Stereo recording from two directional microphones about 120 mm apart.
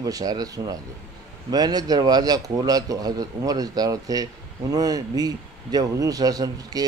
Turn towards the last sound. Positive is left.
turn(degrees=-30)  # may be behind; listen again after turning